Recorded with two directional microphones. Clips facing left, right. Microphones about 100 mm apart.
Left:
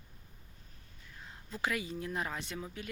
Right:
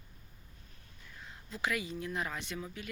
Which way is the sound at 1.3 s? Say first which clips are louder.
Even; 35° left (ahead or behind).